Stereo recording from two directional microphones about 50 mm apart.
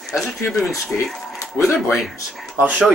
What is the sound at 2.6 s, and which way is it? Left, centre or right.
Speech, right.